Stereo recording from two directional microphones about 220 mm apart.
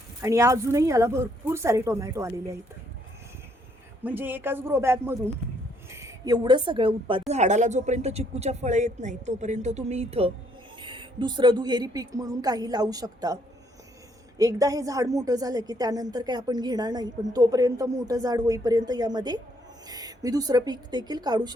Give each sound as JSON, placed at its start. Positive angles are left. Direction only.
{"t": 0.2, "sound": "a woman's voice", "side_deg": -15}
{"t": 4.0, "sound": "a woman's voice", "side_deg": -10}